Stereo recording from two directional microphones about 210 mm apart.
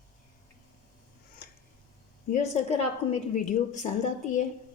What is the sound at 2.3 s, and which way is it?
A woman's voice, 30° left (ahead or behind).